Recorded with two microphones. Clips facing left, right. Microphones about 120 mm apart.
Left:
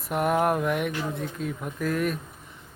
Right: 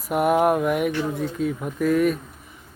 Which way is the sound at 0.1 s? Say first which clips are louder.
Right 5 dB; 5° right (ahead or behind).